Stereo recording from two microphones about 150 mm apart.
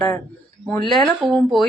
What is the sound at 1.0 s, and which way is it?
Speech, 5° left (ahead or behind).